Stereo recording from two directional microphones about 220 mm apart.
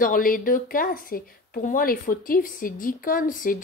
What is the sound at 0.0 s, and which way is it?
A woman's voice, 40° left (ahead or behind).